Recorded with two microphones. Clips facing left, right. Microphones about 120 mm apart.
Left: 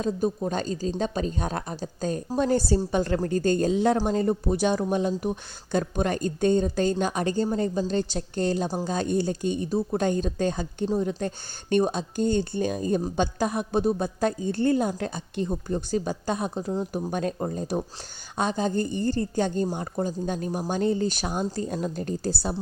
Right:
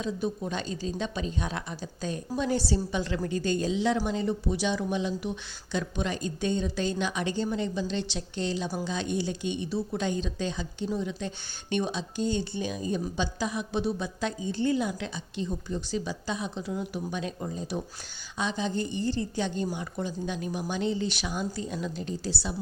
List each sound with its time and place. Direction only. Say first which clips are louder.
0.0 s a woman's voice: left 5 dB; 45° left (ahead or behind)
16.7 s a woman's voice: left 5 dB; 35° left (ahead or behind)